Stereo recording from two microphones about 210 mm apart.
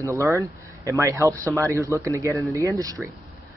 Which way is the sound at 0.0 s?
15° right (ahead or behind).